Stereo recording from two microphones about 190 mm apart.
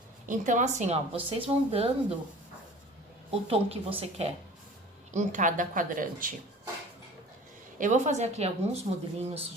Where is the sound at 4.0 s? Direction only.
30° right (ahead or behind).